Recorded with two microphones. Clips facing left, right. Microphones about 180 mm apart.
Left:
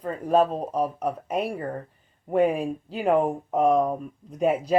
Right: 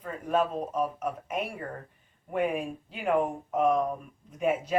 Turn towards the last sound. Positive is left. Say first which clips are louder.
# left 5 dB
turn(degrees=35)  # may be behind; listen again after turning